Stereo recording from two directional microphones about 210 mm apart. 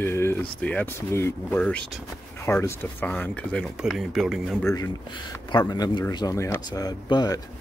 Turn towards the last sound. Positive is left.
turn(degrees=20)  # may be behind; listen again after turning